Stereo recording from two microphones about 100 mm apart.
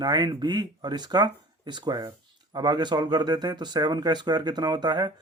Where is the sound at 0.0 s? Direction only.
45° right (ahead or behind).